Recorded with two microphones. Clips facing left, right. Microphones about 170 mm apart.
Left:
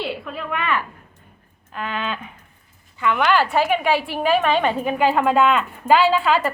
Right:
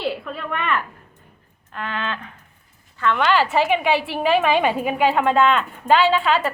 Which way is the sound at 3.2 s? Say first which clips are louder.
Even; centre (ahead or behind).